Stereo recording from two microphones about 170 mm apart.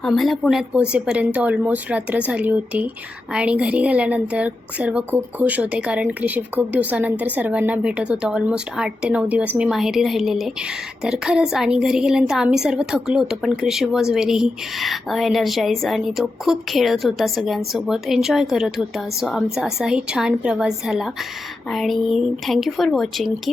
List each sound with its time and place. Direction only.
0.0 s a woman's voice: centre (ahead or behind)